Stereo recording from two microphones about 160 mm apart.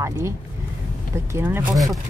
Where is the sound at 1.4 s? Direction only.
15° right (ahead or behind).